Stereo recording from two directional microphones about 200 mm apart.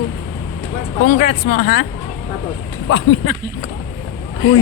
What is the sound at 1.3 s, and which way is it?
Speech, 65° left (ahead or behind).